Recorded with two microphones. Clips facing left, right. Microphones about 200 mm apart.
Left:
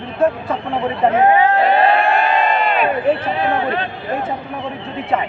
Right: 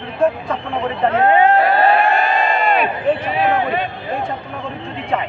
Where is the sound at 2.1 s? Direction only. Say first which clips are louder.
Left 1 dB; 45° right (ahead or behind).